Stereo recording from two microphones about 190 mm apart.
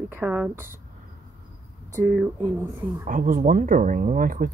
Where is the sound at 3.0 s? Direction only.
45° right (ahead or behind).